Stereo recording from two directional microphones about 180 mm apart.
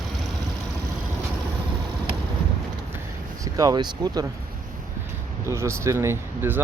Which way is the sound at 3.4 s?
20° right (ahead or behind).